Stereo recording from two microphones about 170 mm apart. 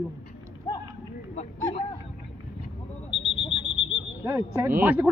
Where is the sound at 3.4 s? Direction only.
35° left (ahead or behind).